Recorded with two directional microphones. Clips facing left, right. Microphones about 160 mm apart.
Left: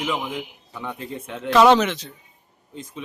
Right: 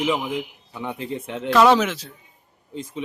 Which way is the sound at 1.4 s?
Centre (ahead or behind).